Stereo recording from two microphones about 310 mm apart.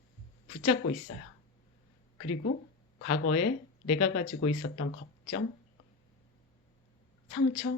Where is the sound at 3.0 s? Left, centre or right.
Left.